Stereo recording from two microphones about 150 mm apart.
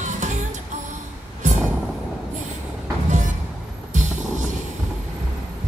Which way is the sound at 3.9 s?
55° right (ahead or behind).